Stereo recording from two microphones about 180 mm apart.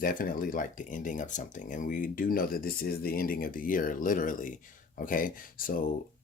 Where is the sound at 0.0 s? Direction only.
50° left (ahead or behind).